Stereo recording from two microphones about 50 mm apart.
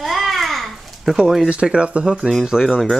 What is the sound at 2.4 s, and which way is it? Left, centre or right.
Speech, centre.